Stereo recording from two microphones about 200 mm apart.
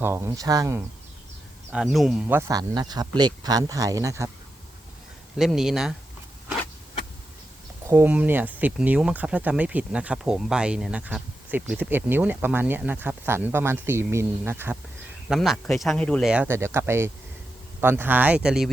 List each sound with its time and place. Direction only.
0.0 s speech: 10° right (ahead or behind)
1.7 s speech: centre (ahead or behind)
2.5 s speech: 20° right (ahead or behind)
5.4 s speech: centre (ahead or behind)
7.9 s speech: 10° right (ahead or behind)
15.3 s speech: centre (ahead or behind)
16.3 s speech: 10° right (ahead or behind)